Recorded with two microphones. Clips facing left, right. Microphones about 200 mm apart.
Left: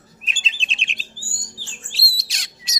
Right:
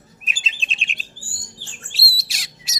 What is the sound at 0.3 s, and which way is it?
Bird, 5° right (ahead or behind).